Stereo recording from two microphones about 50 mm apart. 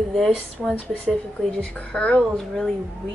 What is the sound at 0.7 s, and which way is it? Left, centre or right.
Speech, centre.